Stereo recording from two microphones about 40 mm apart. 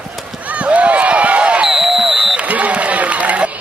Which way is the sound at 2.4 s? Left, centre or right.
Right.